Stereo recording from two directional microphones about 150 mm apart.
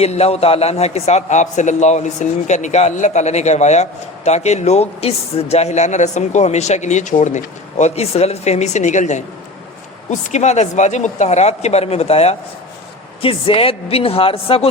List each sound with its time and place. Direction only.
0.0 s a man's voice: 45° left (ahead or behind)